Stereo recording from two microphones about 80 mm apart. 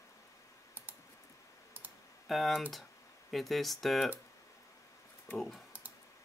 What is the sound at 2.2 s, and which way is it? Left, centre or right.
Speech, centre.